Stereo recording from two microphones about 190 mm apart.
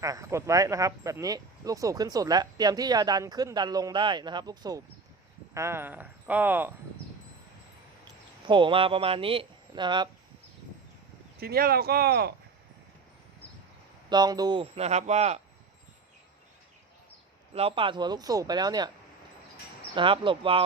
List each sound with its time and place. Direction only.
0.0 s speech: 15° right (ahead or behind)
8.4 s speech: 25° right (ahead or behind)
11.3 s speech: 55° right (ahead or behind)
14.1 s speech: 20° right (ahead or behind)
17.5 s speech: 30° right (ahead or behind)
20.0 s speech: 25° right (ahead or behind)